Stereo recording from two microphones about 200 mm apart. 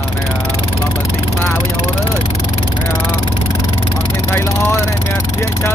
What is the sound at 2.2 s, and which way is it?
Vehicle, 30° left (ahead or behind).